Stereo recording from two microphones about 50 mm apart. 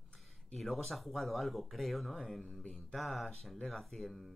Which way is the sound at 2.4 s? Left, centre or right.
Centre.